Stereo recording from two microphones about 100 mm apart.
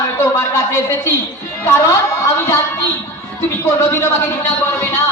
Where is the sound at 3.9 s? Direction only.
25° left (ahead or behind).